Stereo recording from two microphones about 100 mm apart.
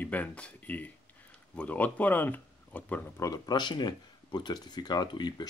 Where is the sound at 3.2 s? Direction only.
40° left (ahead or behind).